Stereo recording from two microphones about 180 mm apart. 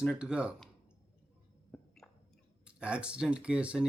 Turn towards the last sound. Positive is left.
turn(degrees=-5)  # may be behind; listen again after turning